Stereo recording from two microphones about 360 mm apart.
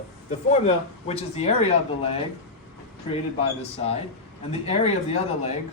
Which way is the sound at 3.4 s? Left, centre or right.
Centre.